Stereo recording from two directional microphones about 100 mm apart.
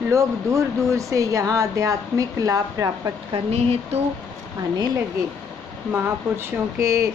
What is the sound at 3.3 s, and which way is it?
Speech, 90° right.